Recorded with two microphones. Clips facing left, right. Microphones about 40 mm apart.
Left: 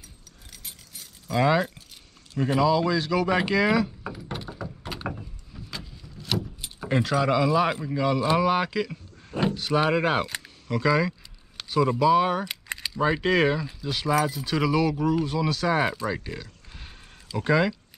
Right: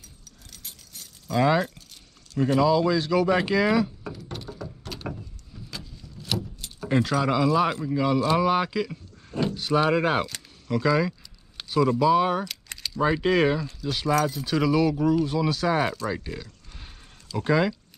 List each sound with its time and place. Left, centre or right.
0.5 s keys jangling: centre
2.3 s mechanisms: centre
5.5 s vehicle: centre
6.9 s speech: centre
8.9 s a sound: centre
9.8 s speech: centre
10.7 s a sound: centre
12.0 s speech: centre
12.4 s keys jangling: left
13.0 s speech: centre
13.7 s speech: centre
16.1 s a sound: centre
17.5 s speech: centre